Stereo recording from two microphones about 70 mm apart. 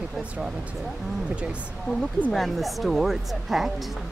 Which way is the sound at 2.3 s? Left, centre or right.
Centre.